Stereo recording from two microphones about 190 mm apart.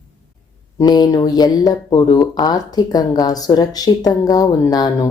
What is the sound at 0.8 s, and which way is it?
Speech, 20° left (ahead or behind).